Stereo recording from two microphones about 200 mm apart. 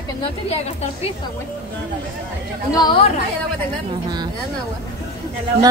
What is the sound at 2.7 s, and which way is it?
Speech, 25° left (ahead or behind).